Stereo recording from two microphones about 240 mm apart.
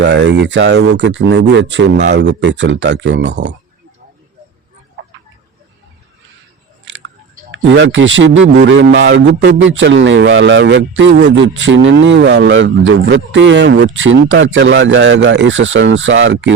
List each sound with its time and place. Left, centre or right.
0.0 s a man's voice: right
7.5 s a man's voice: right